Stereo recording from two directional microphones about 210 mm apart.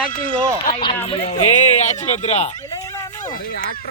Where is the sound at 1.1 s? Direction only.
30° left (ahead or behind).